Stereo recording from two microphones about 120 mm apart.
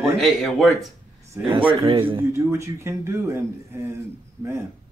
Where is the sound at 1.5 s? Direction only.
45° right (ahead or behind).